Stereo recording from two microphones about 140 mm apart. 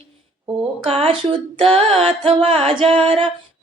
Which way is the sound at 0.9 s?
45° right (ahead or behind).